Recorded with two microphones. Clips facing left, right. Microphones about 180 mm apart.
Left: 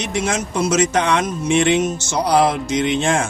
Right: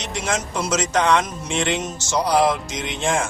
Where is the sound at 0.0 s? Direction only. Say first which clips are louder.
Left 4 dB; 60° left (ahead or behind).